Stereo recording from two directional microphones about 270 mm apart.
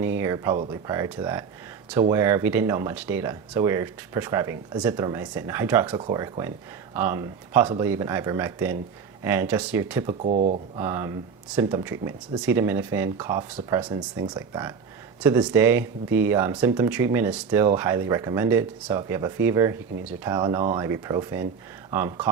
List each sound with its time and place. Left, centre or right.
0.0 s speech: centre
5.9 s speech: centre
10.2 s speech: right
10.8 s speech: centre